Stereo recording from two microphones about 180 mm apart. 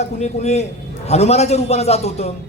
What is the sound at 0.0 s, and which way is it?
A man's voice, 40° left (ahead or behind).